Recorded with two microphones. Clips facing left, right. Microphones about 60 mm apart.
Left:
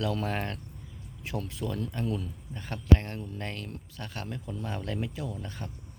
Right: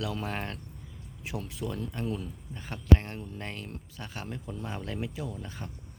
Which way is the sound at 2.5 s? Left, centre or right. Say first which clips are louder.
Even; centre.